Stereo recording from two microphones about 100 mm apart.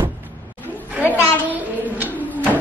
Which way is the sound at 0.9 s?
20° right (ahead or behind).